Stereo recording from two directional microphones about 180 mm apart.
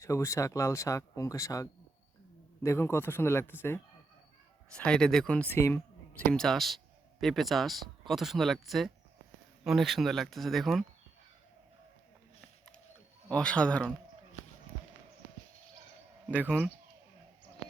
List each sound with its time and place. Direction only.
0.0 s speech: 15° left (ahead or behind)
2.6 s speech: 15° left (ahead or behind)
13.2 s speech: 5° left (ahead or behind)
16.2 s speech: 10° right (ahead or behind)